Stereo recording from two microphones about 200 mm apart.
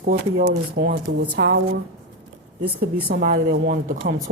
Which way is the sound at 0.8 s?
45° right (ahead or behind).